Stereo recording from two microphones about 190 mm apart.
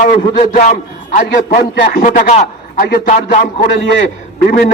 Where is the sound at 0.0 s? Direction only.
40° left (ahead or behind).